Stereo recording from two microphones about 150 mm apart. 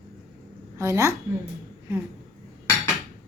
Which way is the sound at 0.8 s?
20° right (ahead or behind).